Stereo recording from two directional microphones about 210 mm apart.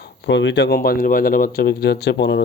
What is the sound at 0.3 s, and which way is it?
Speech, 60° left (ahead or behind).